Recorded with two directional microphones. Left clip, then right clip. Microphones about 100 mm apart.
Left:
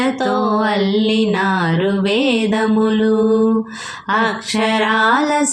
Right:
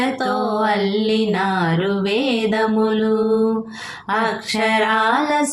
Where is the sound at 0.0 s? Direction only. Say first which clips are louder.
Left 3 dB; 25° left (ahead or behind).